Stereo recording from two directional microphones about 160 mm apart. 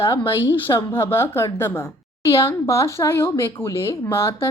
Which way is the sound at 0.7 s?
15° left (ahead or behind).